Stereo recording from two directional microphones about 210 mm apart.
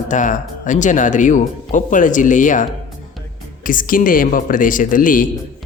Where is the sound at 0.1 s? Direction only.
35° left (ahead or behind).